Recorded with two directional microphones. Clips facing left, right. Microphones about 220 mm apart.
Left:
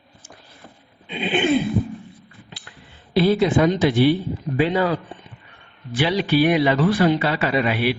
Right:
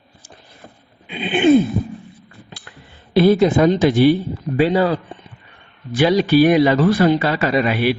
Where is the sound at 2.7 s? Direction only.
50° right (ahead or behind).